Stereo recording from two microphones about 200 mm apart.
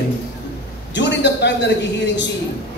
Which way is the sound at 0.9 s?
60° left (ahead or behind).